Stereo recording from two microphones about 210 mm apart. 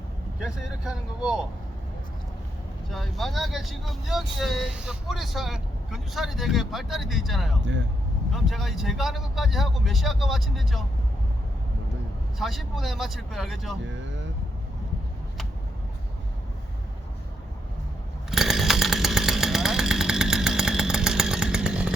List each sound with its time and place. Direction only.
0.4 s speech: 5° right (ahead or behind)
2.9 s speech: centre (ahead or behind)
7.6 s speech: 60° right (ahead or behind)
8.3 s speech: centre (ahead or behind)
12.4 s speech: centre (ahead or behind)
18.3 s chainsaw: centre (ahead or behind)